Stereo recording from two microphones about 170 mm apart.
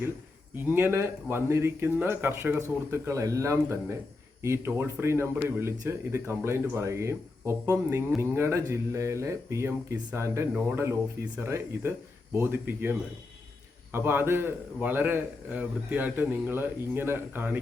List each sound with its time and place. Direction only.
0.5 s a man's voice: 10° right (ahead or behind)